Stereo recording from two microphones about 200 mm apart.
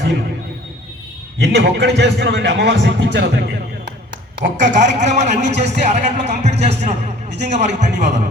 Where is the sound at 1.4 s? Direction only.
55° right (ahead or behind).